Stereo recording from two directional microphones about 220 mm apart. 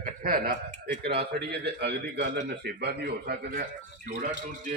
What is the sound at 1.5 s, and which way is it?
A man's voice, 50° right (ahead or behind).